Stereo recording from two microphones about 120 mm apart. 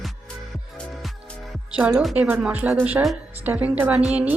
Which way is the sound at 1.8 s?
15° right (ahead or behind).